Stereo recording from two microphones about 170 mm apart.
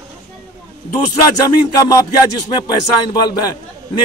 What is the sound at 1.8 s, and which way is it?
A man's voice, 20° left (ahead or behind).